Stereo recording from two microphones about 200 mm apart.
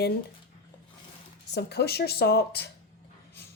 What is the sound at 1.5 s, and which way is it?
Speech, 55° left (ahead or behind).